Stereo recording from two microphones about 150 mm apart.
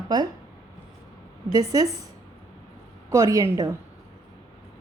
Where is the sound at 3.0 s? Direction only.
20° right (ahead or behind).